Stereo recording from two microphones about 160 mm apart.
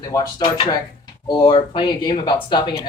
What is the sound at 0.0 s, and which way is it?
Speech, 20° left (ahead or behind).